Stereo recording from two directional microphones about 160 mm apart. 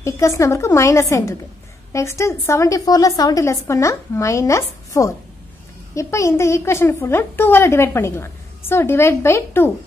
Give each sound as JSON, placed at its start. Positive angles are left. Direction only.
{"t": 0.0, "sound": "a woman's voice", "side_deg": 20}